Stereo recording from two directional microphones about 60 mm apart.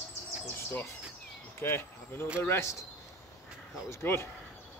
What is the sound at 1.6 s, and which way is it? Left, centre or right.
Speech, left.